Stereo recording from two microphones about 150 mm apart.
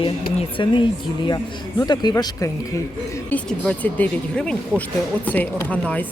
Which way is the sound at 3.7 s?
10° left (ahead or behind).